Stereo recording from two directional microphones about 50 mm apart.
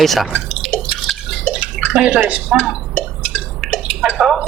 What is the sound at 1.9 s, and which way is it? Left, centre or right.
Speech, centre.